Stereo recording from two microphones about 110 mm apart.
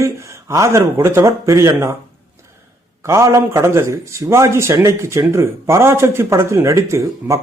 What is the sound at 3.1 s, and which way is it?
A man's voice, 25° right (ahead or behind).